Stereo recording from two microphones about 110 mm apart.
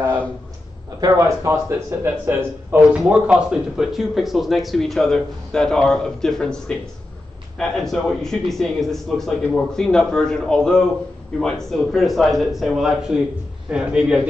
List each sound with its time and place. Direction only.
1.0 s a man's voice: 30° right (ahead or behind); by 14.2 s 10° right (ahead or behind)